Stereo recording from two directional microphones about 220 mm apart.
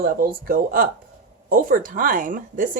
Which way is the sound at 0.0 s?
40° right (ahead or behind).